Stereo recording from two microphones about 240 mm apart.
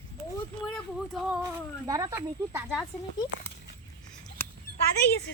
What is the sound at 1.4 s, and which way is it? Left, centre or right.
Speech, centre.